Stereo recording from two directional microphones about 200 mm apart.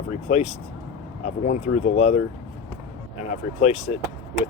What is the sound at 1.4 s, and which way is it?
Speech, 35° left (ahead or behind).